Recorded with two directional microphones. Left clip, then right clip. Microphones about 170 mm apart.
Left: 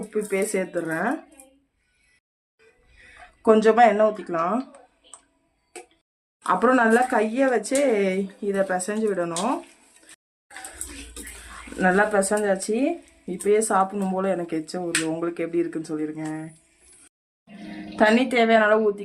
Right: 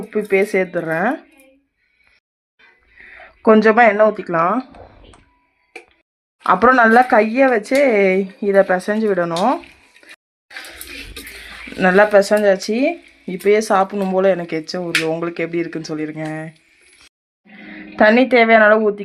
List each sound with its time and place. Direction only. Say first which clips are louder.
0.1 s speech: right 9 dB; 30° right (ahead or behind)
3.4 s speech: right 5 dB; 40° right (ahead or behind)
6.4 s speech: right 8 dB; 40° right (ahead or behind)
11.8 s speech: right 8 dB; 35° right (ahead or behind)
17.7 s speech: right 6 dB; 40° right (ahead or behind)